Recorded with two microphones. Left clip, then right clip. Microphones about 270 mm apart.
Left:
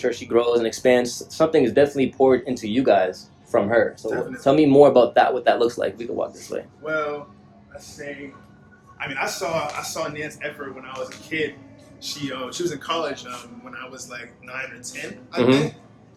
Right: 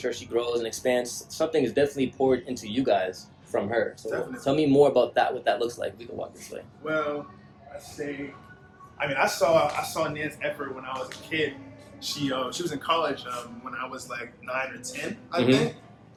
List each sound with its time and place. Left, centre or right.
0.0 s speech: left
6.8 s speech: centre
9.0 s speech: centre
13.7 s speech: centre